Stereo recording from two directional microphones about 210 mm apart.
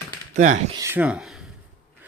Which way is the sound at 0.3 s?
35° right (ahead or behind).